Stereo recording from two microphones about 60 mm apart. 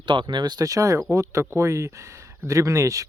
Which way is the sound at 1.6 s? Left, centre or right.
Right.